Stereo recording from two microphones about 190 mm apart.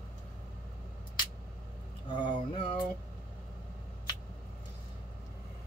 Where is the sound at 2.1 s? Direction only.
25° left (ahead or behind).